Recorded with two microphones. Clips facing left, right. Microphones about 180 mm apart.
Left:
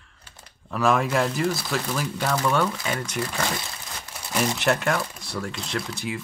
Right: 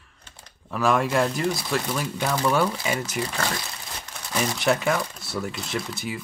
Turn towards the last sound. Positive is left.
turn(degrees=0)  # may be behind; listen again after turning